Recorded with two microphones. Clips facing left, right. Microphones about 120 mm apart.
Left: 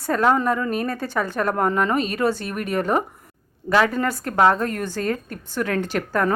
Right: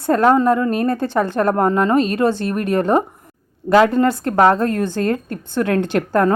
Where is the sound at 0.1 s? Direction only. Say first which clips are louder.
Right 5 dB; 40° right (ahead or behind).